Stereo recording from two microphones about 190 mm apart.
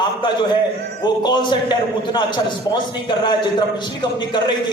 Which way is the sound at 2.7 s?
25° left (ahead or behind).